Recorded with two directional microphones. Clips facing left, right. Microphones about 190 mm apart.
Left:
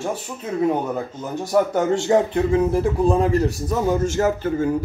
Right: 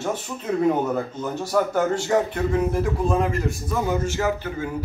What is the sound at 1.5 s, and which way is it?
Speech, 20° left (ahead or behind).